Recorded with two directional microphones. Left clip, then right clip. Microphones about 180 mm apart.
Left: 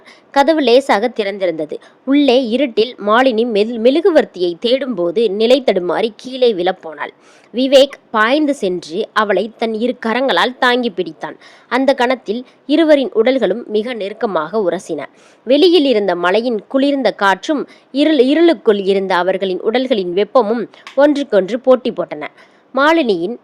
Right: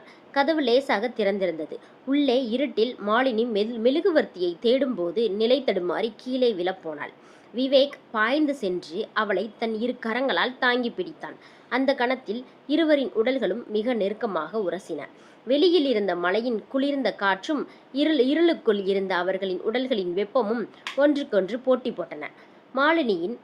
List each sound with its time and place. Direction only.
0.3 s a woman's voice: 45° left (ahead or behind)